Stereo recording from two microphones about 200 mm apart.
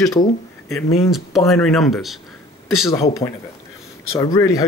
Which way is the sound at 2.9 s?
15° left (ahead or behind).